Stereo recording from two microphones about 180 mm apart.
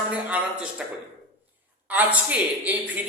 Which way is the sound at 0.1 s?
5° right (ahead or behind).